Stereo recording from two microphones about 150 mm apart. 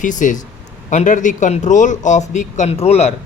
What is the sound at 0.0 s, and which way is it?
Speech, 55° left (ahead or behind).